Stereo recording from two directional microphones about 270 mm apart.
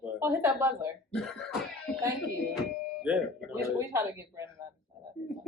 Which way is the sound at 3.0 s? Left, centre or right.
Centre.